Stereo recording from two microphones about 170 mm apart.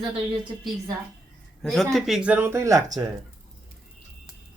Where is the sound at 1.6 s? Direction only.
Centre (ahead or behind); by 2.8 s 15° right (ahead or behind).